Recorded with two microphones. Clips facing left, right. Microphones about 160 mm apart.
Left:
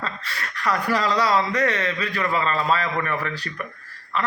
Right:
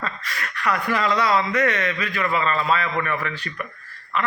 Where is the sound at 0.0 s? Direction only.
30° left (ahead or behind).